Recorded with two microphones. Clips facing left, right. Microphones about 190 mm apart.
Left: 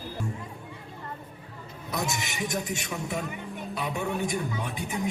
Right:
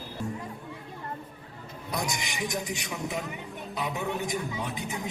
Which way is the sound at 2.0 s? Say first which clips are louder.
Left 1 dB; 25° left (ahead or behind).